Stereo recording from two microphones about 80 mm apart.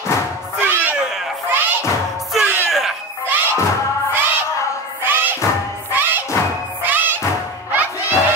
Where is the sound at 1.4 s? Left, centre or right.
Right.